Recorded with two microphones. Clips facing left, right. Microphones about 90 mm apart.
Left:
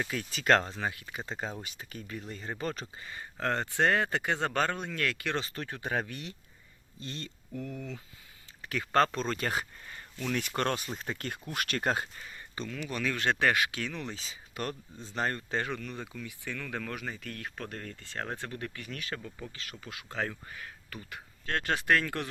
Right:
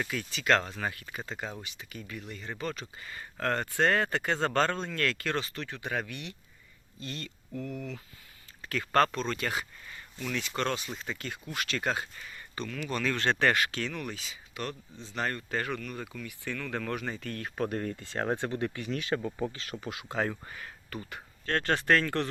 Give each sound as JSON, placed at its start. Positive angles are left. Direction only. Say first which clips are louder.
{"t": 0.1, "sound": "speech", "louder": "left 2 dB", "side_deg": 40}
{"t": 0.8, "sound": "speech", "louder": "even", "side_deg": 15}
{"t": 3.0, "sound": "speech", "louder": "right 2 dB", "side_deg": 20}
{"t": 5.4, "sound": "speech", "louder": "right 1 dB", "side_deg": 35}
{"t": 7.7, "sound": "speech", "louder": "right 2 dB", "side_deg": 0}
{"t": 8.7, "sound": "speech", "louder": "right 1 dB", "side_deg": 20}
{"t": 9.1, "sound": "speech", "louder": "even", "side_deg": 35}
{"t": 12.1, "sound": "a sound", "louder": "right 1 dB", "side_deg": 25}
{"t": 12.6, "sound": "speech", "louder": "right 2 dB", "side_deg": 10}
{"t": 14.2, "sound": "speech", "louder": "left 1 dB", "side_deg": 40}
{"t": 16.8, "sound": "speech", "louder": "right 4 dB", "side_deg": 0}
{"t": 17.5, "sound": "speech", "louder": "right 9 dB", "side_deg": -15}
{"t": 20.1, "sound": "speech", "louder": "right 3 dB", "side_deg": -10}
{"t": 20.5, "sound": "speech", "louder": "right 3 dB", "side_deg": 0}